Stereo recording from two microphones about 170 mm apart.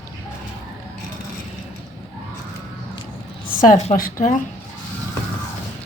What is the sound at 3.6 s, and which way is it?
Speech, 45° left (ahead or behind).